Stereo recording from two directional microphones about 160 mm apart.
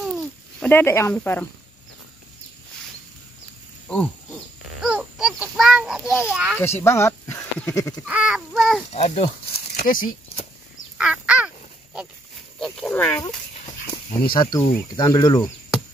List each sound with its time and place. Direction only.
0.0 s a sound: centre (ahead or behind)
0.7 s speech: 15° left (ahead or behind)
3.8 s a sound: 10° left (ahead or behind)
4.8 s a sound: 5° right (ahead or behind)
6.6 s speech: 15° left (ahead or behind)
8.0 s speech: 10° right (ahead or behind)
8.9 s speech: 40° left (ahead or behind)
9.8 s speech: 60° left (ahead or behind)
11.0 s duck: 5° right (ahead or behind)
12.5 s pig: 5° left (ahead or behind)
14.3 s speech: 30° left (ahead or behind)